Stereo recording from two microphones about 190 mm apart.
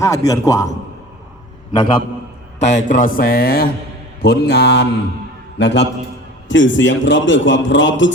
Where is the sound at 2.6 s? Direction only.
40° left (ahead or behind).